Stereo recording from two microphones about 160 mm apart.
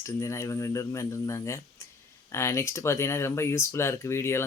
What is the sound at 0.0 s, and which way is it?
Speech, 20° left (ahead or behind).